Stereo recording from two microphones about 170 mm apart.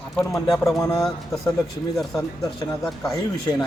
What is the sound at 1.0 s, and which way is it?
Speech, centre (ahead or behind).